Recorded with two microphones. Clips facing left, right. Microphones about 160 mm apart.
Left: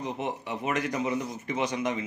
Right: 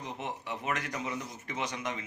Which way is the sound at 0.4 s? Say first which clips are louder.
Left 5 dB; 10° left (ahead or behind).